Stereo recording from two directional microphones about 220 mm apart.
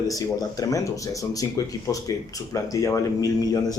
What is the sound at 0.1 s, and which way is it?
Speech, 15° left (ahead or behind).